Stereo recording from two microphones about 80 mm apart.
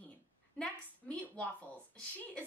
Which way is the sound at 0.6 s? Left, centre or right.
Centre.